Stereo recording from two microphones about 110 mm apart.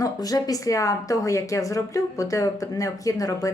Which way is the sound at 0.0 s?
35° left (ahead or behind).